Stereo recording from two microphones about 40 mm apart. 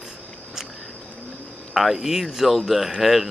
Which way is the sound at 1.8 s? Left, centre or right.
Centre.